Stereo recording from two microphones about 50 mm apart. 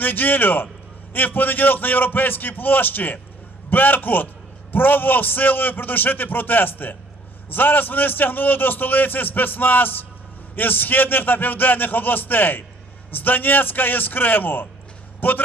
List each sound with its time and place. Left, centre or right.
0.0 s a man's voice: left